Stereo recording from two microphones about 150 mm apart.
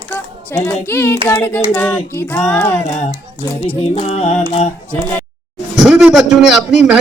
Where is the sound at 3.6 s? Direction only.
45° left (ahead or behind).